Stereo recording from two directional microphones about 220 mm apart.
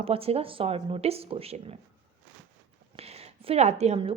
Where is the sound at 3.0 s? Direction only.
30° right (ahead or behind).